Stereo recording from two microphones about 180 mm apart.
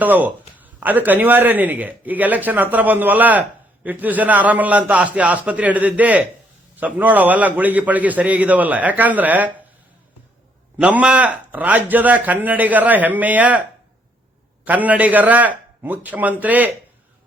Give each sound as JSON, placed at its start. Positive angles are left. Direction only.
{"t": 0.0, "sound": "a man's voice", "side_deg": -10}
{"t": 10.8, "sound": "a man's voice", "side_deg": -5}
{"t": 14.6, "sound": "a man's voice", "side_deg": -10}